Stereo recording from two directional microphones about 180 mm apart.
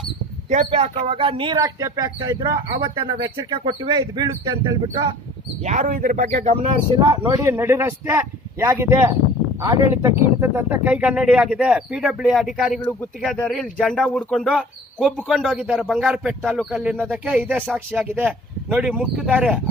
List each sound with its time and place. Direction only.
0.5 s speech: 35° right (ahead or behind)
5.7 s speech: 45° right (ahead or behind)
6.9 s speech: 20° right (ahead or behind)